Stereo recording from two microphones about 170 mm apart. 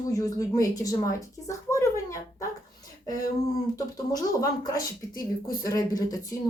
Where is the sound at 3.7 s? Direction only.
20° left (ahead or behind).